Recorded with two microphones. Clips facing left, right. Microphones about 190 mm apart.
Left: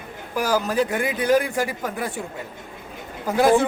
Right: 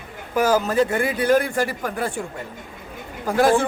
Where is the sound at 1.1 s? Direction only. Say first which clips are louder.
Even; 15° left (ahead or behind).